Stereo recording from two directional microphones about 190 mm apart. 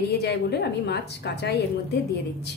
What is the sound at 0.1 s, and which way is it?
A woman's voice, 60° left (ahead or behind).